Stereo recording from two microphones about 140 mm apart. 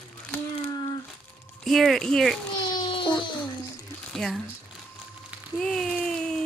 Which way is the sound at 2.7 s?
35° left (ahead or behind).